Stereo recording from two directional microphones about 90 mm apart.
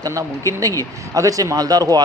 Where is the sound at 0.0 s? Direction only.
35° right (ahead or behind).